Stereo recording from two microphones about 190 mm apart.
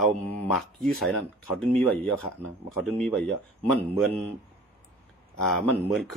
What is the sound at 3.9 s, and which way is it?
Speech, 30° right (ahead or behind).